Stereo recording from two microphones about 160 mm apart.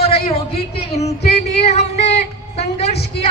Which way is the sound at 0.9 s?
45° left (ahead or behind).